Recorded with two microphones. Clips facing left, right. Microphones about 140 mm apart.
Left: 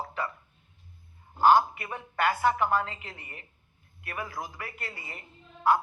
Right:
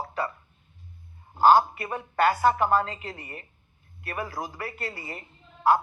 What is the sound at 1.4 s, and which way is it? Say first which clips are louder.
A man's voice: right 2 dB; 35° right (ahead or behind).